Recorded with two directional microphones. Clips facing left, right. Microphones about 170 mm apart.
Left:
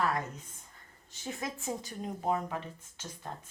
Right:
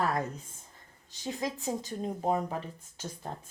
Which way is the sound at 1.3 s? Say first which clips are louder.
Right 4 dB; 35° right (ahead or behind).